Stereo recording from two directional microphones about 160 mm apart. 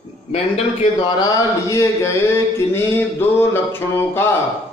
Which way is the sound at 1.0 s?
25° left (ahead or behind).